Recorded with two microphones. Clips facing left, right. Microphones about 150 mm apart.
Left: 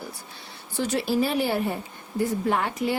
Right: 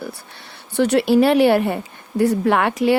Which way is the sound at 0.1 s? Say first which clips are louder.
Right 5 dB; 65° right (ahead or behind).